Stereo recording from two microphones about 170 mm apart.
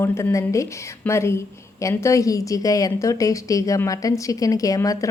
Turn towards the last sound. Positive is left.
turn(degrees=20)  # may be behind; listen again after turning